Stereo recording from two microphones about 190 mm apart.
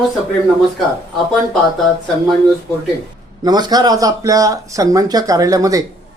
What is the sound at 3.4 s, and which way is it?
Speech, 20° right (ahead or behind).